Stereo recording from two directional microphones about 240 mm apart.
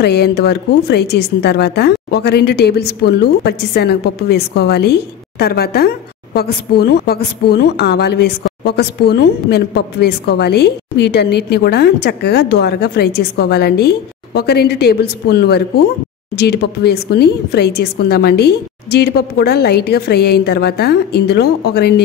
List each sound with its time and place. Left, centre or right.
0.0 s speech: left